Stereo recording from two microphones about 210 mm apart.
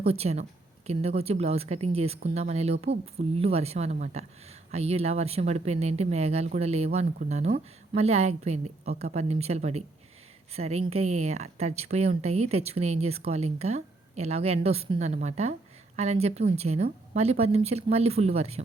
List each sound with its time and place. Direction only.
0.0 s a woman's voice: 30° right (ahead or behind)